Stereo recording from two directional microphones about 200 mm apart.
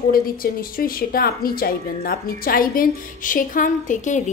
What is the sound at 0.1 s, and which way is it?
A woman's voice, 45° left (ahead or behind).